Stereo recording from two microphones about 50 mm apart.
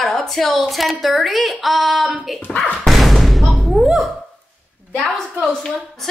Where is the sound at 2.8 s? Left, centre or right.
Centre.